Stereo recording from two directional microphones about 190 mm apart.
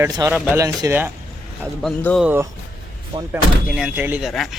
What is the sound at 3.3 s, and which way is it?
Speech, 5° right (ahead or behind).